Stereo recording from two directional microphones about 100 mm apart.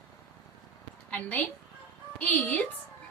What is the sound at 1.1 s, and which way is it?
A woman's voice, 15° left (ahead or behind).